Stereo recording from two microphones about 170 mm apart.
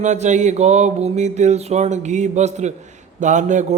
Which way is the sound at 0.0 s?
45° right (ahead or behind).